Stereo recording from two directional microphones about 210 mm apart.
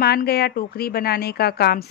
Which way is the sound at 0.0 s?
50° left (ahead or behind).